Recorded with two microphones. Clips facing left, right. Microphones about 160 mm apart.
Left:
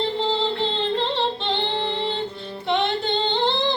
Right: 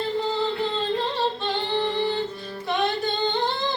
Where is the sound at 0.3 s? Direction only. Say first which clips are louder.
Left 2 dB; 25° left (ahead or behind).